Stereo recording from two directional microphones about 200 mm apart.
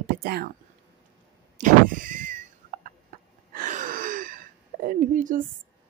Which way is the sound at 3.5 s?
40° right (ahead or behind).